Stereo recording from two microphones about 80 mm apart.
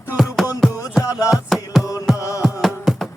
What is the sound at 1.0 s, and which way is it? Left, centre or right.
Music, left.